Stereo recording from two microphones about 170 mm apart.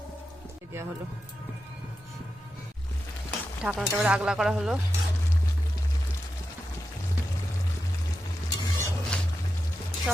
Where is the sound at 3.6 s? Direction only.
5° right (ahead or behind).